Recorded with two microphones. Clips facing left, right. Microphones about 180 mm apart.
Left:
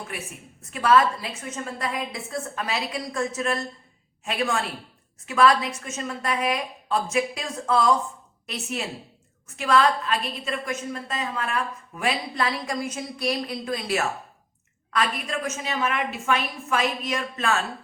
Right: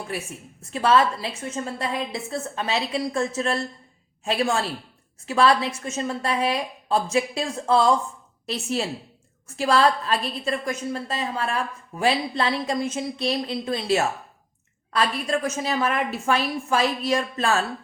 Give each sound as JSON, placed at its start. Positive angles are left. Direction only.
{"t": 0.1, "sound": "a woman's voice", "side_deg": -30}